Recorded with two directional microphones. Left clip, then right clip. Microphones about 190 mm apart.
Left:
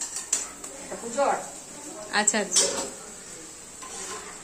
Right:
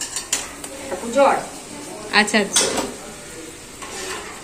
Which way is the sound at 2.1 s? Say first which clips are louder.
Right 8 dB; 15° left (ahead or behind).